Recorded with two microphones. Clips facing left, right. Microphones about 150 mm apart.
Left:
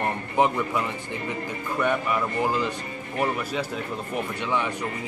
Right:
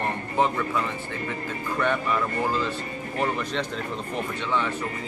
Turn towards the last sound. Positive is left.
turn(degrees=10)  # may be behind; listen again after turning